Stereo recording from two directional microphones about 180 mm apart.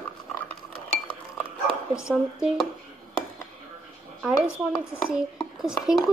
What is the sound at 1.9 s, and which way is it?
Speech, 15° left (ahead or behind).